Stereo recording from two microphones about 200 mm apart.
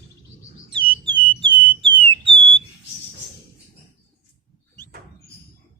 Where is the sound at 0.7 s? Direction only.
25° right (ahead or behind).